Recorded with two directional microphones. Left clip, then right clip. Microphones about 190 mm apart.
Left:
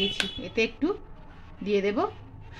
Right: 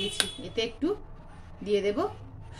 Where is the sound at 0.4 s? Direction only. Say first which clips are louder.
Left 3 dB; 25° left (ahead or behind).